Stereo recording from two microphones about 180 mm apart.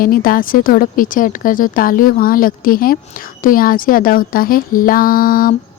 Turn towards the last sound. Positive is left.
turn(degrees=50)  # may be behind; listen again after turning